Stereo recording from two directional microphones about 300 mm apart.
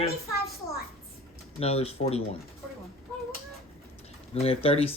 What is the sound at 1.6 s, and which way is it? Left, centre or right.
Speech, centre.